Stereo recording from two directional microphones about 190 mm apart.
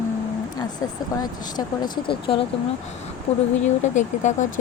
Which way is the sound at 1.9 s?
25° left (ahead or behind).